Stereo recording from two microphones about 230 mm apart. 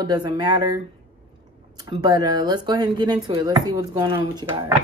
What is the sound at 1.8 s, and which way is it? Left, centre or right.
Speech, centre.